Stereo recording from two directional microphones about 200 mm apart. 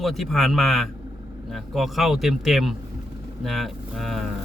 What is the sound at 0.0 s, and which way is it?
A man's voice, centre (ahead or behind).